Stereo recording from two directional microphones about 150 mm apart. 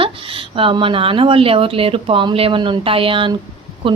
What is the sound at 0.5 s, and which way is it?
A woman's voice, 35° right (ahead or behind).